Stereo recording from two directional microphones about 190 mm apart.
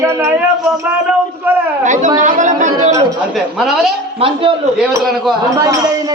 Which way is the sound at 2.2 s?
40° right (ahead or behind).